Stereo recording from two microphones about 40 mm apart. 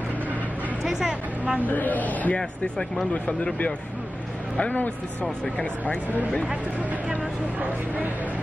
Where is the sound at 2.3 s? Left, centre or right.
Left.